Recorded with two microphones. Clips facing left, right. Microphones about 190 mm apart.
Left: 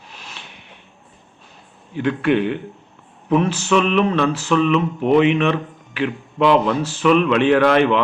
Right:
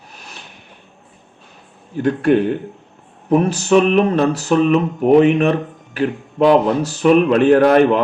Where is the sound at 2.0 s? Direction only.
40° right (ahead or behind).